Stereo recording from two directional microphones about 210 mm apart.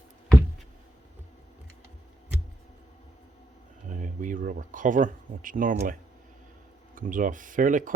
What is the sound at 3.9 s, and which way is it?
Speech, 40° right (ahead or behind).